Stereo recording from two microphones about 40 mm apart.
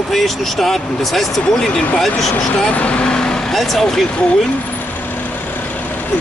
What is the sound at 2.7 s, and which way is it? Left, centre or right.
Speech, left.